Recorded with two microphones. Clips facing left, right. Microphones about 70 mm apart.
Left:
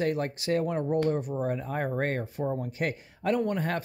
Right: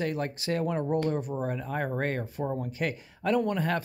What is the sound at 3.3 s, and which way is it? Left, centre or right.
Speech, left.